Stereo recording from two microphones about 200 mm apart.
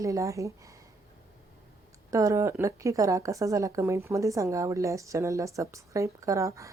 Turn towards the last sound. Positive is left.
turn(degrees=-15)  # may be behind; listen again after turning